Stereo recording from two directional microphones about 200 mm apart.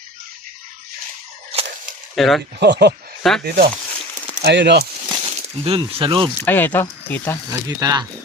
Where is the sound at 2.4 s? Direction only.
55° right (ahead or behind).